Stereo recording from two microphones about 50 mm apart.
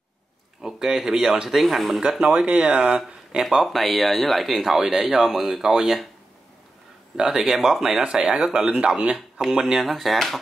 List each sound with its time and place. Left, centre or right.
0.6 s speech: centre
2.0 s speech: centre
2.3 s speech: right
2.8 s speech: centre
7.2 s speech: centre
9.8 s speech: centre